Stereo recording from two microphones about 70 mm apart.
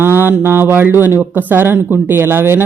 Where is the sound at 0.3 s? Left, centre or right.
Right.